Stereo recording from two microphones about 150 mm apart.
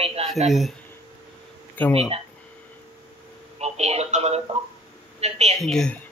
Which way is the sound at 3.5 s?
45° right (ahead or behind).